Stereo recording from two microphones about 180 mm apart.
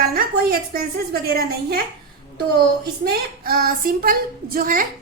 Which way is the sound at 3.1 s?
55° right (ahead or behind).